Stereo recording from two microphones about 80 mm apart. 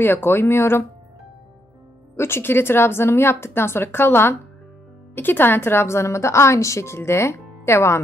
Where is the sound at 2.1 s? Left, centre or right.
Left.